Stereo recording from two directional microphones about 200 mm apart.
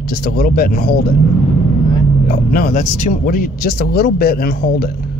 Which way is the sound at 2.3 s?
45° left (ahead or behind).